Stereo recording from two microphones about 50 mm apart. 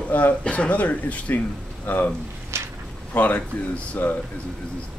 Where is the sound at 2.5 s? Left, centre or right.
Right.